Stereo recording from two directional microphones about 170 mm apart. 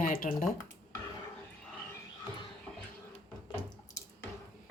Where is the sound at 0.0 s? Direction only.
55° left (ahead or behind).